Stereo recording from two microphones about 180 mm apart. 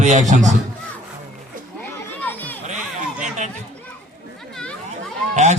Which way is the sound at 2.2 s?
10° left (ahead or behind).